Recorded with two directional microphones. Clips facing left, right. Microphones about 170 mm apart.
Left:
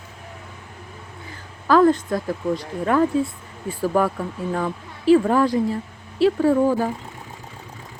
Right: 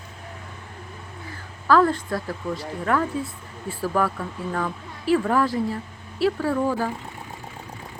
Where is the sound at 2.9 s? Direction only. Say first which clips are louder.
Left 4 dB; 20° left (ahead or behind).